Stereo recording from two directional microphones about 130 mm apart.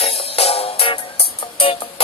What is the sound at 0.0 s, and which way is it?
Music, 50° left (ahead or behind).